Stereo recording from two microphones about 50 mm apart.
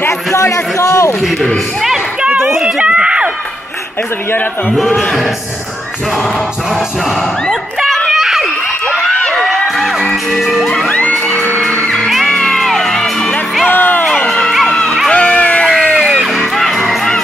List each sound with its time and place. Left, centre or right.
0.3 s a man's voice: left
2.6 s run: right
4.7 s speech: centre
8.1 s screaming: centre
9.3 s a sound: centre
10.9 s music: left
11.9 s music: centre
13.7 s music: left
14.0 s crowd: left
15.0 s a sound: left
15.8 s music: left